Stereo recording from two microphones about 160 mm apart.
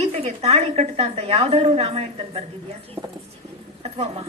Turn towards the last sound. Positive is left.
turn(degrees=-40)  # may be behind; listen again after turning